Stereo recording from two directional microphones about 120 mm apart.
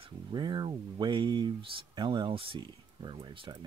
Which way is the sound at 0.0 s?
40° right (ahead or behind).